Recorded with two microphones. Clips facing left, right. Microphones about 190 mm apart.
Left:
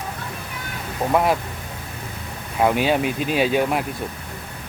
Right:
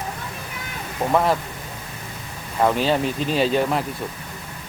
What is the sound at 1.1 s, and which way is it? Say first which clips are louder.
Speech: even; 10° left (ahead or behind).